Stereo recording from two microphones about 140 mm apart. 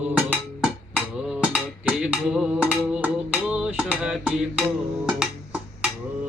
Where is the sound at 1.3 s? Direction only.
10° right (ahead or behind).